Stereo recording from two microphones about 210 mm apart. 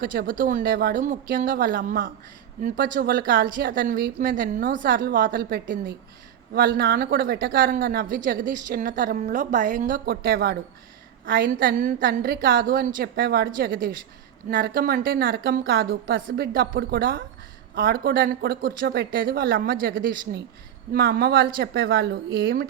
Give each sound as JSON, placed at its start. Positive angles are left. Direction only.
{"t": 0.0, "sound": "speech", "side_deg": -45}